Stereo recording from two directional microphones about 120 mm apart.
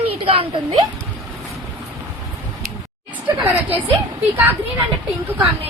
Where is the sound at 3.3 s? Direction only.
15° right (ahead or behind).